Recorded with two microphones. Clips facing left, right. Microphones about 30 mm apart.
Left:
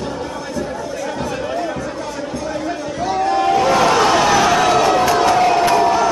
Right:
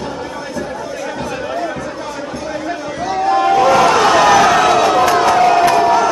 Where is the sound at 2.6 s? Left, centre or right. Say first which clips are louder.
Right 2 dB; centre.